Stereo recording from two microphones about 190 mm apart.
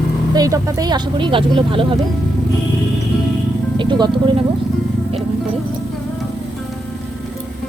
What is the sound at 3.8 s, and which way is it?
Music, 25° right (ahead or behind).